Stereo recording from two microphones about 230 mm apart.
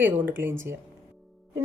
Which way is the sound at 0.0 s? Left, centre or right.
Centre.